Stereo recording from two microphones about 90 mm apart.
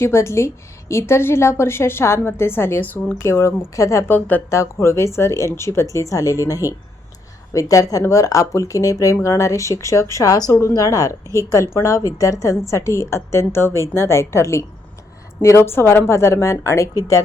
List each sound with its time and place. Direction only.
0.0 s a woman's voice: 30° left (ahead or behind)
4.1 s a woman's voice: 20° left (ahead or behind)
4.4 s a woman's voice: 30° left (ahead or behind)